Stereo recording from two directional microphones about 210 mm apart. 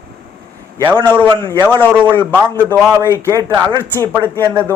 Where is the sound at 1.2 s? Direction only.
20° right (ahead or behind).